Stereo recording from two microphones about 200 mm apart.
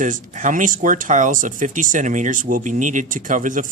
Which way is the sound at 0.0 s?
40° right (ahead or behind).